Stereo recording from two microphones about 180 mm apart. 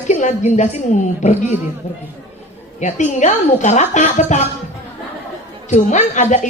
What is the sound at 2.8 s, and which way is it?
A woman's voice, 40° left (ahead or behind).